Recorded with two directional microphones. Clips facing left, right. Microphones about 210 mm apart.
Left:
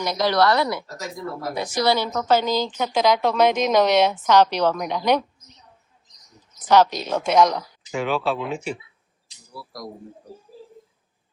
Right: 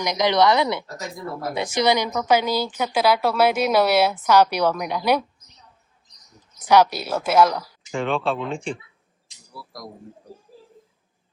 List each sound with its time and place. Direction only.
0.0 s a woman's voice: 15° right (ahead or behind)
6.7 s speech: 10° right (ahead or behind)